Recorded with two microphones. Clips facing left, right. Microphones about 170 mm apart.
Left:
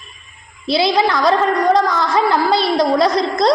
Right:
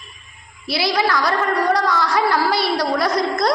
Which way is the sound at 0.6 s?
25° left (ahead or behind).